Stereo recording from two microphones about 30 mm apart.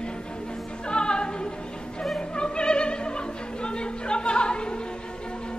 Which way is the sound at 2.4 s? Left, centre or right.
Left.